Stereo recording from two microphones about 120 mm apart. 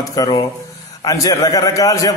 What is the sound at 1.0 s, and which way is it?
Mantra, 30° left (ahead or behind).